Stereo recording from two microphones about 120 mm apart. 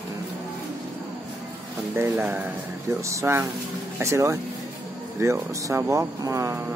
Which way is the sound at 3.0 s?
25° right (ahead or behind).